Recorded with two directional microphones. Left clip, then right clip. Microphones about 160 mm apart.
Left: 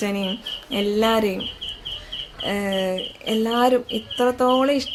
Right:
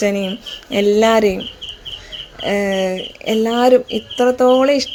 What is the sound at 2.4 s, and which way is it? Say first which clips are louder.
Speech: right 7 dB; 35° right (ahead or behind).